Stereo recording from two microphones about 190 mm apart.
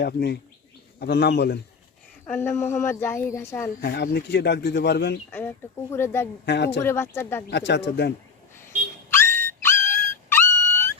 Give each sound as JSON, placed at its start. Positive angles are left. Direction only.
{"t": 0.0, "sound": "speech", "side_deg": 60}
{"t": 2.2, "sound": "speech", "side_deg": 10}
{"t": 3.8, "sound": "speech", "side_deg": 55}
{"t": 5.9, "sound": "speech", "side_deg": 15}
{"t": 6.4, "sound": "speech", "side_deg": 65}
{"t": 6.7, "sound": "speech", "side_deg": 15}
{"t": 7.5, "sound": "speech", "side_deg": 65}
{"t": 9.0, "sound": "music", "side_deg": 15}